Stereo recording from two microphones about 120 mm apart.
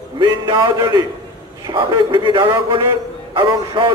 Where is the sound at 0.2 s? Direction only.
35° right (ahead or behind).